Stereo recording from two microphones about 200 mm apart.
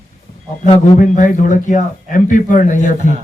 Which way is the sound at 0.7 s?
40° left (ahead or behind).